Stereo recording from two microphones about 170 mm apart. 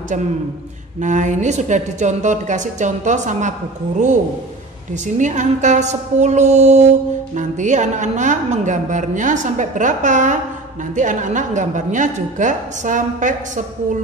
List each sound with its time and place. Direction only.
1.0 s a woman's voice: 45° right (ahead or behind)
5.0 s a woman's voice: 45° right (ahead or behind)